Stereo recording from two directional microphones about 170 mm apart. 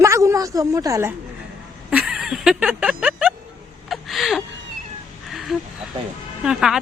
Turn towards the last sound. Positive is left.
turn(degrees=-5)  # may be behind; listen again after turning